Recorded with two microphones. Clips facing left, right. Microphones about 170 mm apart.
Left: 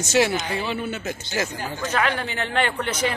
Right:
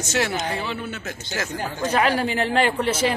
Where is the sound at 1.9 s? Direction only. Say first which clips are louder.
Right 4 dB; 35° right (ahead or behind).